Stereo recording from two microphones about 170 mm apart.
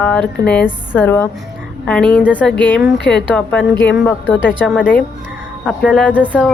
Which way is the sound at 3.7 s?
90° left.